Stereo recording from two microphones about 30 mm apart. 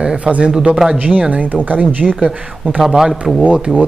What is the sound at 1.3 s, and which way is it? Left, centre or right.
Speech, right.